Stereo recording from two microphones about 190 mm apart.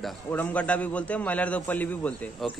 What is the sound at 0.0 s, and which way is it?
A man's voice, 10° left (ahead or behind).